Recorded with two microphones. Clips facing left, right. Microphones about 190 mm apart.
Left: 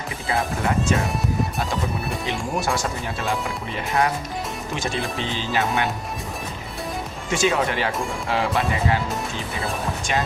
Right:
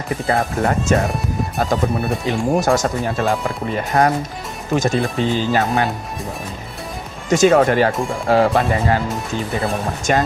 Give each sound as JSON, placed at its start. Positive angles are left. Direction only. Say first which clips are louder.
{"t": 0.3, "sound": "speech", "louder": "right 5 dB", "side_deg": -50}
{"t": 2.2, "sound": "speech", "louder": "right 8 dB", "side_deg": -40}
{"t": 7.3, "sound": "speech", "louder": "right 9 dB", "side_deg": -45}
{"t": 10.1, "sound": "speech", "louder": "right 8 dB", "side_deg": -45}